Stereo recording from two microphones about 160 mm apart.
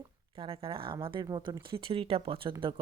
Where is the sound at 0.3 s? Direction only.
35° right (ahead or behind).